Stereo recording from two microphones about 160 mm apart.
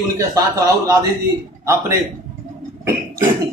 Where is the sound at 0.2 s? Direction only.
20° right (ahead or behind).